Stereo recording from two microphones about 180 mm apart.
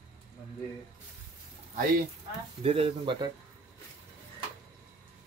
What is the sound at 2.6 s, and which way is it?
Speech, 30° right (ahead or behind).